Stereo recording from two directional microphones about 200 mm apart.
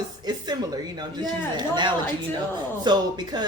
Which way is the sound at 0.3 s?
20° right (ahead or behind).